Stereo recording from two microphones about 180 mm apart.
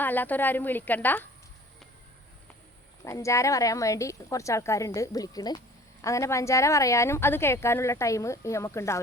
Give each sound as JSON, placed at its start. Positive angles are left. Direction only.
{"t": 0.0, "sound": "speech", "side_deg": 10}
{"t": 3.0, "sound": "speech", "side_deg": 15}